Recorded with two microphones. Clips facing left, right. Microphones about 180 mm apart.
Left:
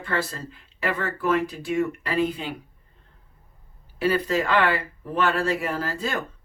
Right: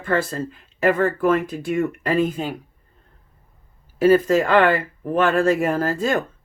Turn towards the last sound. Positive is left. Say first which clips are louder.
# right 7 dB
turn(degrees=-50)  # may be behind; listen again after turning